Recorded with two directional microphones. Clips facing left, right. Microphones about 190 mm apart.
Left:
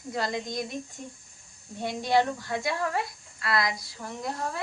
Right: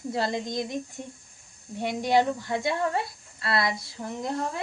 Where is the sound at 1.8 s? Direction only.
15° right (ahead or behind).